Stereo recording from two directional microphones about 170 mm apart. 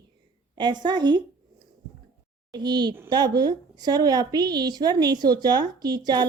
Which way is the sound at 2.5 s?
25° right (ahead or behind).